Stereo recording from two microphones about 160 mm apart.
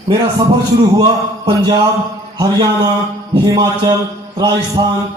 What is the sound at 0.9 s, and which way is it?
A man's voice, 25° right (ahead or behind).